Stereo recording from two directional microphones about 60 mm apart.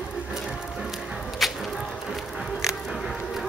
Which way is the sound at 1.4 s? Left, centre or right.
Centre.